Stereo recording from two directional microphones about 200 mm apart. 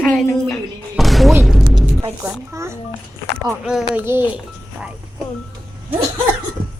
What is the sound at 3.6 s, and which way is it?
Speech, centre (ahead or behind).